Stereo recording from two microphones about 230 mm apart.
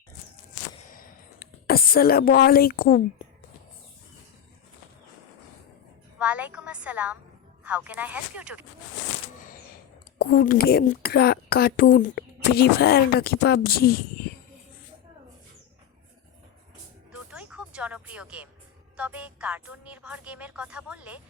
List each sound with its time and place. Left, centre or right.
0.9 s a sound: left
6.1 s a sound: centre
7.6 s speech: centre
10.2 s a woman's voice: left
17.1 s music: centre
18.9 s speech: centre